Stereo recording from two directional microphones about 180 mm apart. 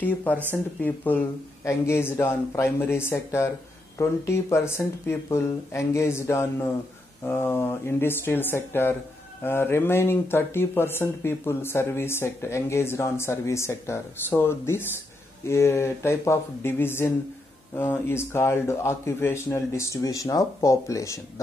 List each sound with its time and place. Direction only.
0.0 s speech: 10° left (ahead or behind)